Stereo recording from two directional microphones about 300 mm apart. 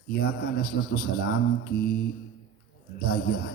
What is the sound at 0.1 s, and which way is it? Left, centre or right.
A man's voice, left.